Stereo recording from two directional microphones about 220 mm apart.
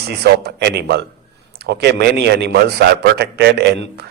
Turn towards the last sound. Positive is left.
turn(degrees=-50)  # may be behind; listen again after turning